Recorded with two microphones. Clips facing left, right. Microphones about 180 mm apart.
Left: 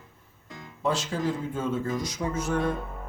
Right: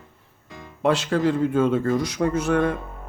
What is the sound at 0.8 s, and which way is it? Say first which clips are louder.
A man's voice: right 7 dB; 65° right (ahead or behind).